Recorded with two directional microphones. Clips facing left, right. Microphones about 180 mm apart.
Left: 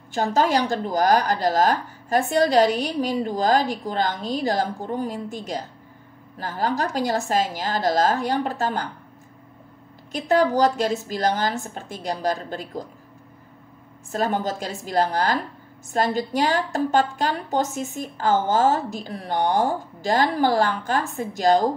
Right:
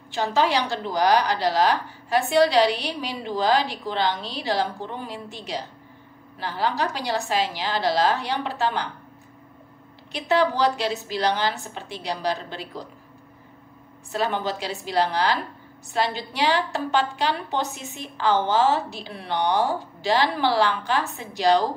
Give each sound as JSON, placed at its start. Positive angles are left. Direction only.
{"t": 0.1, "sound": "a woman's voice", "side_deg": 45}
{"t": 10.1, "sound": "a woman's voice", "side_deg": 45}
{"t": 14.1, "sound": "a woman's voice", "side_deg": 45}